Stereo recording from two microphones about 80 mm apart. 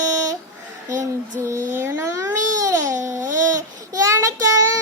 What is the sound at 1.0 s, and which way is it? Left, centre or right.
Female singing, right.